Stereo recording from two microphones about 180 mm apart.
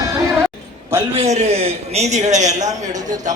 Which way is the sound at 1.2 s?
40° right (ahead or behind).